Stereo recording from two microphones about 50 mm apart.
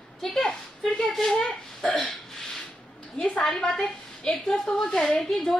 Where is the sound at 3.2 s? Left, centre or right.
Centre.